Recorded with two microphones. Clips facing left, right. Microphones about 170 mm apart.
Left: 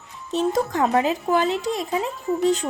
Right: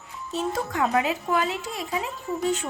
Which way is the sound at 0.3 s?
35° left (ahead or behind).